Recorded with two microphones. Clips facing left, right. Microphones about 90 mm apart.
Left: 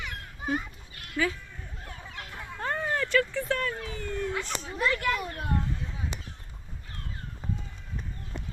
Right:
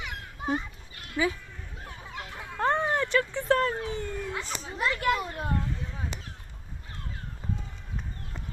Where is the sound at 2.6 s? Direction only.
30° right (ahead or behind).